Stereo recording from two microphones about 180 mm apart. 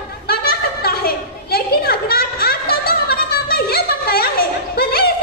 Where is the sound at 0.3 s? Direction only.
60° left (ahead or behind).